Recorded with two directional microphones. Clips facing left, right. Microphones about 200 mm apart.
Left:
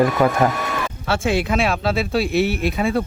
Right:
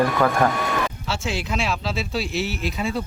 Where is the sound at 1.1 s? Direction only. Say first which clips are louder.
Left 7 dB; 55° left (ahead or behind).